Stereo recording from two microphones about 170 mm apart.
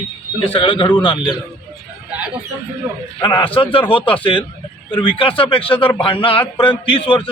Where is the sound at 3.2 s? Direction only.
30° left (ahead or behind).